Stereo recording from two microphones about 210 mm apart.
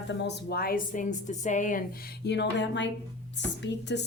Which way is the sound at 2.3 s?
55° left (ahead or behind).